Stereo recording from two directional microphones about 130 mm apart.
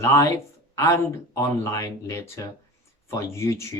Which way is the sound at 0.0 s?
25° left (ahead or behind).